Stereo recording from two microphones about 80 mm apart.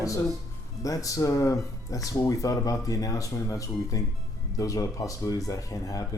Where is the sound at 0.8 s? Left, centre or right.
Left.